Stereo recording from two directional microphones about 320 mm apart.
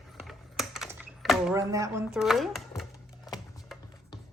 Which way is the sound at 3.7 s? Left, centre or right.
Centre.